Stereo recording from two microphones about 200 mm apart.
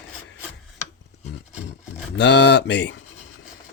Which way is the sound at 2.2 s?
60° left (ahead or behind).